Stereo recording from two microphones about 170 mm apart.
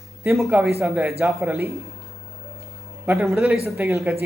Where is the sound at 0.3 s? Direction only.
5° right (ahead or behind).